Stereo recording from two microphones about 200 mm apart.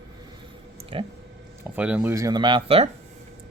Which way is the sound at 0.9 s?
25° right (ahead or behind).